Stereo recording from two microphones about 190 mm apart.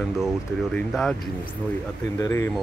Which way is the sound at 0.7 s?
5° left (ahead or behind).